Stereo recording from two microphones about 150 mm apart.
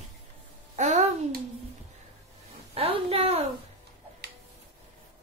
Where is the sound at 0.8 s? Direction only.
50° right (ahead or behind).